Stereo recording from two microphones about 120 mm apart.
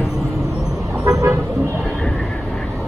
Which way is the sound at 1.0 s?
30° right (ahead or behind).